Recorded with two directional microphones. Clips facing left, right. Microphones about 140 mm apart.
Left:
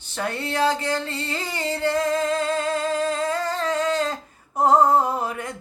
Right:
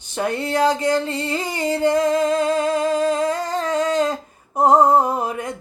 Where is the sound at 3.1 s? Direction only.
15° right (ahead or behind).